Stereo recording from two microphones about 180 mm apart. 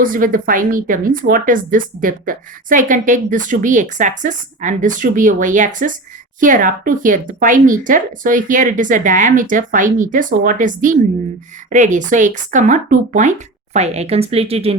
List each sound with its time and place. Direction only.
0.0 s speech: 50° right (ahead or behind); by 14.8 s 35° right (ahead or behind)